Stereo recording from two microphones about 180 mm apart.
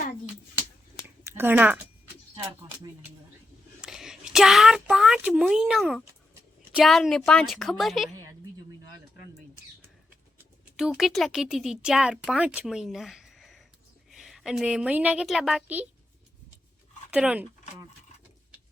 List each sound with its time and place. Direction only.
1.2 s speech: 10° right (ahead or behind)
2.3 s music: 20° right (ahead or behind)
3.8 s a woman's voice: 5° right (ahead or behind)
8.1 s a sound: 15° right (ahead or behind)
10.8 s a woman's voice: centre (ahead or behind)
17.1 s speech: 5° right (ahead or behind)